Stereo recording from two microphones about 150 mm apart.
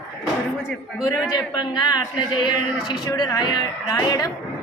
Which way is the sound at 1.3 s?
30° left (ahead or behind).